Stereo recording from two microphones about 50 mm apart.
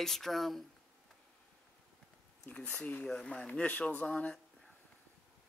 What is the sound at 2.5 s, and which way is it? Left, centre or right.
Speech, left.